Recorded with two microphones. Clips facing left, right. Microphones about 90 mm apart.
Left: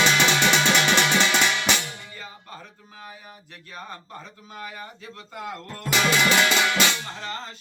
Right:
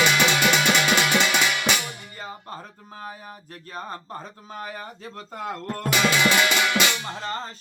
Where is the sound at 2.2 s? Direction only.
40° right (ahead or behind).